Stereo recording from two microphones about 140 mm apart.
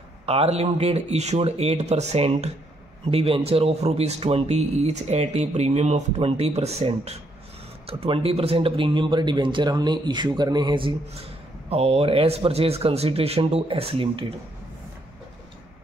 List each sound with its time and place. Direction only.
0.3 s a man's voice: 45° right (ahead or behind)
11.7 s a man's voice: 45° right (ahead or behind)